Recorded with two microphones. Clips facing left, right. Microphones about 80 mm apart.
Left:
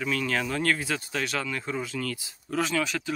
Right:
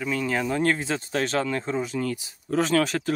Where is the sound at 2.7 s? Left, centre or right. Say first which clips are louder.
Right 6 dB; right.